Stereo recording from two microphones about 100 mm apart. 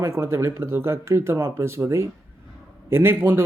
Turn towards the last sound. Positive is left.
turn(degrees=-20)  # may be behind; listen again after turning